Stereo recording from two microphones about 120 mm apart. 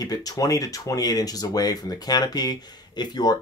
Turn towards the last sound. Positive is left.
turn(degrees=35)  # may be behind; listen again after turning